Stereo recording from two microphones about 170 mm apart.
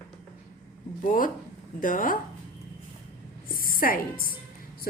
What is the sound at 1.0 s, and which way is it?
A woman's voice, 55° left (ahead or behind).